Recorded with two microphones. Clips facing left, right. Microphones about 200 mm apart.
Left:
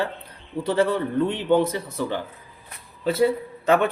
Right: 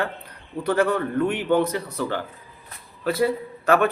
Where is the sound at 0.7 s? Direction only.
25° left (ahead or behind).